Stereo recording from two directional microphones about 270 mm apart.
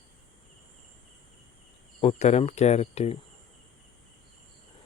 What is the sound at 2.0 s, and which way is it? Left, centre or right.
Speech, left.